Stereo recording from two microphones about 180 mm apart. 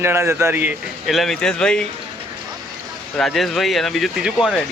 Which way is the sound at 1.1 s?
Centre (ahead or behind).